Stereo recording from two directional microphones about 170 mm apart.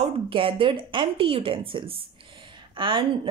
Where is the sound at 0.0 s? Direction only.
30° right (ahead or behind).